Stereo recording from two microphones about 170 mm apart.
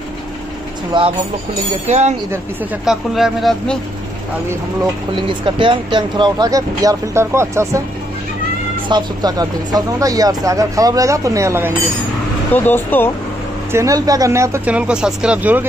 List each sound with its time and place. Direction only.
0.9 s speech: 30° right (ahead or behind)
1.9 s speech: 40° right (ahead or behind)
2.8 s speech: centre (ahead or behind)
5.1 s speech: 30° right (ahead or behind)
8.8 s speech: 25° right (ahead or behind)
12.5 s speech: 10° left (ahead or behind)
13.7 s speech: 15° right (ahead or behind)